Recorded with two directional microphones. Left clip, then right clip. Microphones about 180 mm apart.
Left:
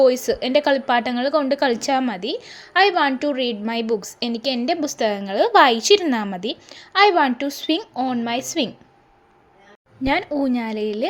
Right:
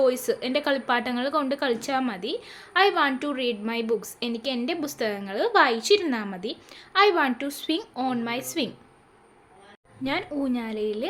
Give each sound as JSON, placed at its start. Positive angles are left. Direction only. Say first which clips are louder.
{"t": 0.0, "sound": "a woman's voice", "louder": "left 6 dB", "side_deg": 25}
{"t": 10.0, "sound": "speech", "louder": "left 7 dB", "side_deg": 35}